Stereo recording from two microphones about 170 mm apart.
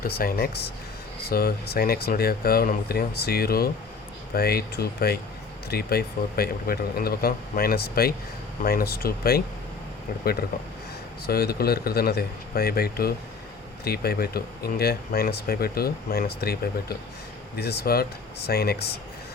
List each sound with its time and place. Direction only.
0.0 s speech: 60° left (ahead or behind)
11.3 s speech: 65° left (ahead or behind)